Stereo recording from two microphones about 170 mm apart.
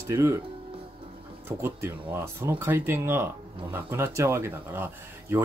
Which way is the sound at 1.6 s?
15° right (ahead or behind).